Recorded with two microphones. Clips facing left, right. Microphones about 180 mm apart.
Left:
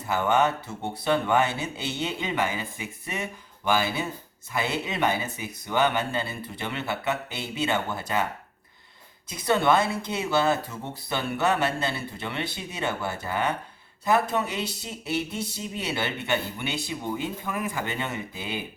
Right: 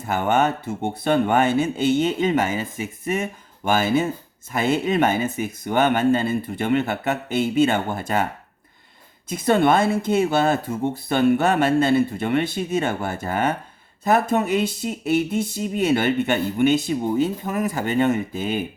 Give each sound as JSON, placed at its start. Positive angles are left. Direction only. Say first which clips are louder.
{"t": 0.1, "sound": "speech", "louder": "right 3 dB", "side_deg": -50}
{"t": 9.3, "sound": "speech", "louder": "right 5 dB", "side_deg": -50}